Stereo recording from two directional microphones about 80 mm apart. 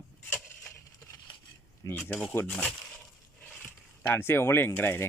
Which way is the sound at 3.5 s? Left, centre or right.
Left.